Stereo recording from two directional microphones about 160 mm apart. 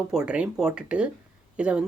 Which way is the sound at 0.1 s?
5° right (ahead or behind).